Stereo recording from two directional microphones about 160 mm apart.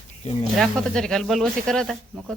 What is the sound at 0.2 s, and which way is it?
Speech, 45° left (ahead or behind).